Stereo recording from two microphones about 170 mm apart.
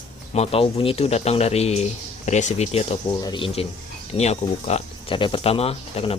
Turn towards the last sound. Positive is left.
turn(degrees=35)  # may be behind; listen again after turning